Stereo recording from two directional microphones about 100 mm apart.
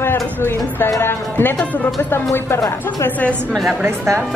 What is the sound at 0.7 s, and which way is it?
Speech, 25° left (ahead or behind).